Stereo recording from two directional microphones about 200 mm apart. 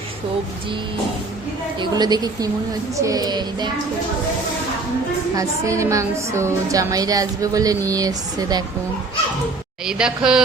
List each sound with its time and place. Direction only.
1.8 s a sound: 20° right (ahead or behind)
5.4 s a woman's voice: 15° right (ahead or behind)
9.8 s speech: 5° right (ahead or behind)